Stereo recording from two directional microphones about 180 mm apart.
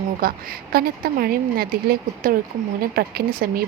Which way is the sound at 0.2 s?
55° right (ahead or behind).